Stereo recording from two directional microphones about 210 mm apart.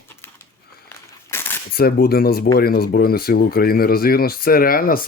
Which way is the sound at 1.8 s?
45° left (ahead or behind).